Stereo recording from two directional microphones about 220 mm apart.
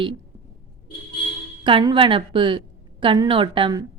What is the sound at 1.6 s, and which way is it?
A woman's voice, 20° right (ahead or behind).